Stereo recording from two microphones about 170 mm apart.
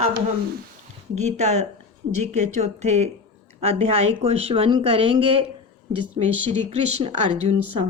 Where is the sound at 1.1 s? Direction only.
40° right (ahead or behind).